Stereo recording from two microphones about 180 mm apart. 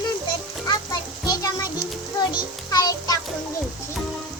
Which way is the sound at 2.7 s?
20° left (ahead or behind).